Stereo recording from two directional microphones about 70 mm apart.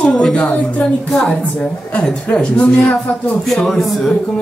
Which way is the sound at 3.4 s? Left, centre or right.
Centre.